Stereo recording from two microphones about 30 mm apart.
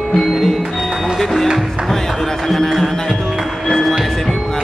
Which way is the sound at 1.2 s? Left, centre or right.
Centre.